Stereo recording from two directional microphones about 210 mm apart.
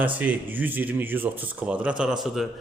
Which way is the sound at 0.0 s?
10° right (ahead or behind).